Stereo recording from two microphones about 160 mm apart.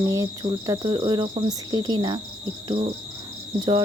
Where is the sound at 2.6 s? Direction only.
35° right (ahead or behind).